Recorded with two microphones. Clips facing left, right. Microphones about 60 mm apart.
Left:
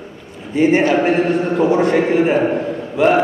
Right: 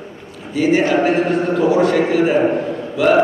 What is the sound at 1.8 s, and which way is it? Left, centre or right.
Speech, left.